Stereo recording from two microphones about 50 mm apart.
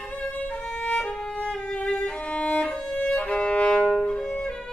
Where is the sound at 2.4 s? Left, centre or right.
Left.